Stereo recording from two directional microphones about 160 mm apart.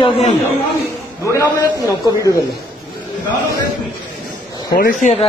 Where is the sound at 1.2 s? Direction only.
20° left (ahead or behind).